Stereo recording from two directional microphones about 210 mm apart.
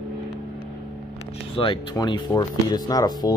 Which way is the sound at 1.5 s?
25° left (ahead or behind).